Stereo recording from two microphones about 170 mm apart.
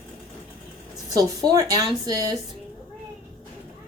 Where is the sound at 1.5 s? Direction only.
20° right (ahead or behind).